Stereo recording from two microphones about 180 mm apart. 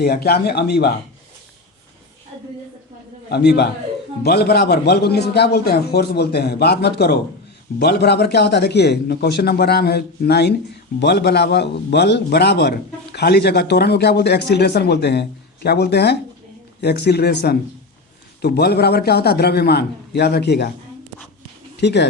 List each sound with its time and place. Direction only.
0.0 s a man's voice: 60° left (ahead or behind)
3.2 s a man's voice: 65° left (ahead or behind)
21.8 s speech: 70° left (ahead or behind)